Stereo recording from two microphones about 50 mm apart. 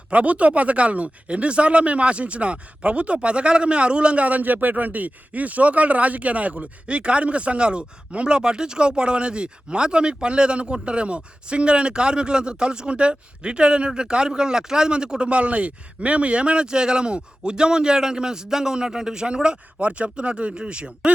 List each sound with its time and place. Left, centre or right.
0.1 s speech: right